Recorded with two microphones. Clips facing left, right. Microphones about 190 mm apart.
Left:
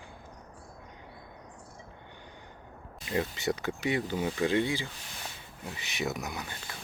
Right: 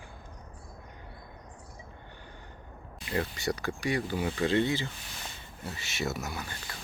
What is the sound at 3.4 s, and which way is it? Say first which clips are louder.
Speech: left 1 dB; 20° left (ahead or behind).